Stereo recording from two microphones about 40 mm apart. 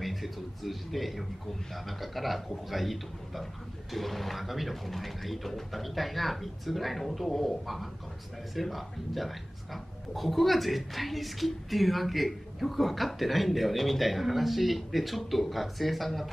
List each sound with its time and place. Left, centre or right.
0.0 s a man's voice: centre